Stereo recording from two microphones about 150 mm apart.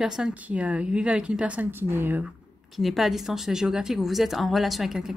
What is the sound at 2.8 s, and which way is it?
Speech, centre (ahead or behind).